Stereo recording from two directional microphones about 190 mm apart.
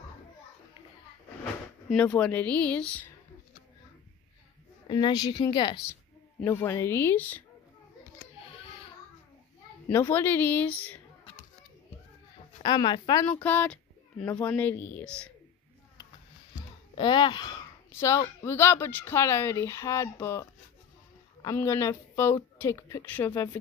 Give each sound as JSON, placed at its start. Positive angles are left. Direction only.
{"t": 1.9, "sound": "speech", "side_deg": 5}
{"t": 4.8, "sound": "a woman's voice", "side_deg": 25}
{"t": 9.8, "sound": "speech", "side_deg": 10}
{"t": 12.6, "sound": "a woman's voice", "side_deg": 25}
{"t": 13.4, "sound": "speech", "side_deg": 10}
{"t": 16.9, "sound": "a woman's voice", "side_deg": 25}